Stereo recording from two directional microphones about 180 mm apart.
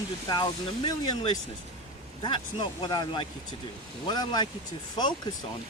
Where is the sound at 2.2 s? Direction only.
25° left (ahead or behind).